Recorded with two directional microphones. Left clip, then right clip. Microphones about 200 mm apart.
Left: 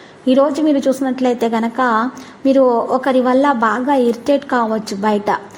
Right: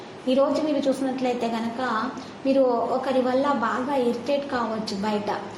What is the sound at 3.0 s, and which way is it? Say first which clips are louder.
A woman's voice: left 10 dB; 50° left (ahead or behind).